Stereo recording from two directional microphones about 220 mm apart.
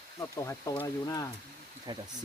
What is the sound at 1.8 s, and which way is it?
Speech, 20° right (ahead or behind).